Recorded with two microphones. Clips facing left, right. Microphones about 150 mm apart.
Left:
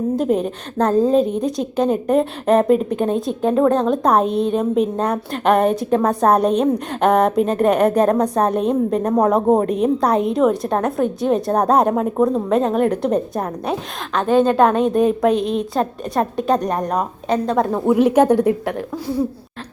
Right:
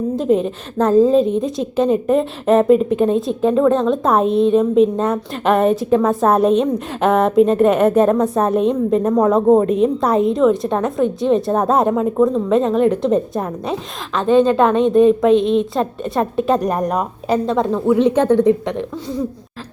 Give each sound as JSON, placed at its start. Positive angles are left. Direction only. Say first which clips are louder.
{"t": 0.2, "sound": "a woman's voice", "louder": "right 2 dB", "side_deg": 0}
{"t": 9.1, "sound": "a woman's voice", "louder": "right 2 dB", "side_deg": 20}
{"t": 9.6, "sound": "a woman's voice", "louder": "right 1 dB", "side_deg": 0}
{"t": 17.7, "sound": "a woman's voice", "louder": "right 1 dB", "side_deg": 15}